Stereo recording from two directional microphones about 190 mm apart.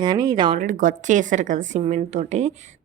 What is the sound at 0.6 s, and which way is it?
A woman's voice, 45° right (ahead or behind).